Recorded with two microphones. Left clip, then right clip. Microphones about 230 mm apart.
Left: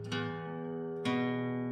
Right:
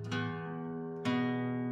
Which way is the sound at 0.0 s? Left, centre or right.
Right.